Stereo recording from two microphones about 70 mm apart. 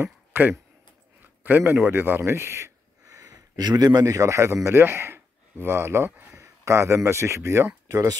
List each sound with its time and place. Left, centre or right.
0.0 s a sound: right
1.9 s speech: right
3.2 s a man's voice: right
6.3 s speech: right